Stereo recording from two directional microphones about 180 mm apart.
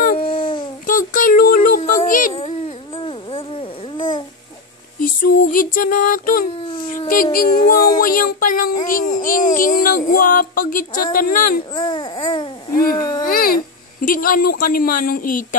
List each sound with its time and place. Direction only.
0.2 s babbling: 30° left (ahead or behind)
0.8 s child singing: 50° left (ahead or behind)
1.8 s a sound: 45° left (ahead or behind)
2.3 s dog: 30° left (ahead or behind)
3.9 s babbling: 25° left (ahead or behind)
5.0 s child singing: 50° left (ahead or behind)
6.6 s a sound: 30° left (ahead or behind)
6.9 s a sound: 50° left (ahead or behind)
7.3 s child singing: 55° left (ahead or behind)
11.7 s babbling: 25° left (ahead or behind)
12.7 s child singing: 50° left (ahead or behind)